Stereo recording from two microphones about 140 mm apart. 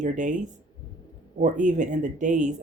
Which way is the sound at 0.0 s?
60° right (ahead or behind).